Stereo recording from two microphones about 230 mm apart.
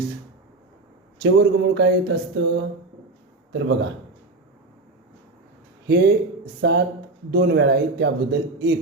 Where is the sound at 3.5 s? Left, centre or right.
Right.